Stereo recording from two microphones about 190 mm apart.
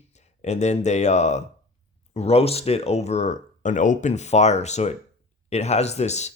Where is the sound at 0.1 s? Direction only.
35° left (ahead or behind).